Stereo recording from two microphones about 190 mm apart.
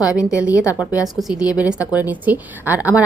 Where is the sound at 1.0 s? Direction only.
Centre (ahead or behind).